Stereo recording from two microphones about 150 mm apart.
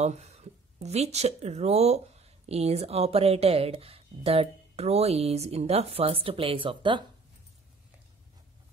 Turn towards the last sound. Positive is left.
turn(degrees=-35)  # may be behind; listen again after turning